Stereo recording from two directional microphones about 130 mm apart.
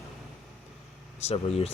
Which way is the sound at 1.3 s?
50° left (ahead or behind).